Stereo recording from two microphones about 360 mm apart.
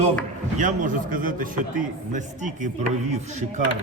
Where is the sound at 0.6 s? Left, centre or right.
Right.